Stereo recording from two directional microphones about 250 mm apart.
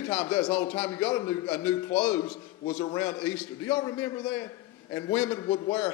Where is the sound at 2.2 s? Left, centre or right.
Left.